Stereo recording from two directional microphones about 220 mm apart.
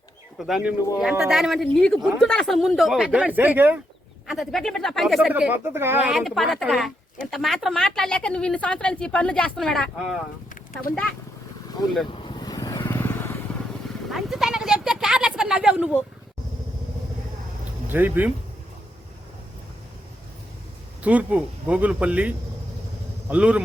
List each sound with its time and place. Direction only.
0.3 s speech: centre (ahead or behind)
6.1 s speech: centre (ahead or behind)
10.5 s a sound: 35° left (ahead or behind)
11.8 s speech: 15° left (ahead or behind)
12.1 s vehicle: 20° left (ahead or behind)
14.1 s a sound: centre (ahead or behind)
17.8 s speech: 10° right (ahead or behind)
21.0 s speech: 5° right (ahead or behind)
23.3 s speech: 5° right (ahead or behind)